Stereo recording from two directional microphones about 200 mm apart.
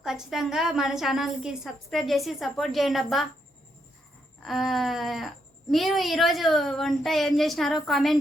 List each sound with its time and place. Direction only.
0.0 s a woman's voice: centre (ahead or behind)
4.4 s a woman's voice: centre (ahead or behind)